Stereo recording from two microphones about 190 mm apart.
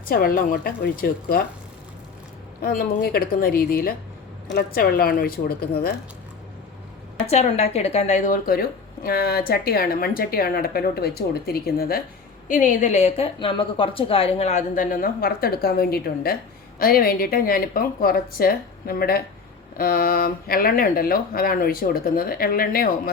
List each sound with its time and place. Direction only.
0.1 s a woman's voice: 50° left (ahead or behind)
2.6 s a woman's voice: 50° left (ahead or behind)
7.3 s a woman's voice: 35° left (ahead or behind); by 22.9 s 50° left (ahead or behind)